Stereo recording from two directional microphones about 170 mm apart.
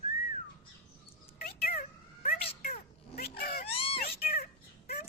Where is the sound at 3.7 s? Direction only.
35° left (ahead or behind).